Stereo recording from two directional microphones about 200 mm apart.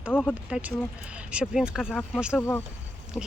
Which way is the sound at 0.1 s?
5° left (ahead or behind).